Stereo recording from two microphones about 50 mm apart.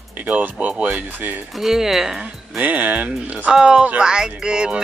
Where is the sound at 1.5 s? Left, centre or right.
Centre.